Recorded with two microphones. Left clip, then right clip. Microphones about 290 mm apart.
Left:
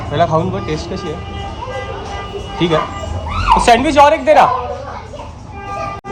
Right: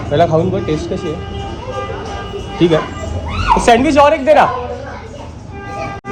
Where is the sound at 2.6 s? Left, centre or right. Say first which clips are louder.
Right 2 dB; centre.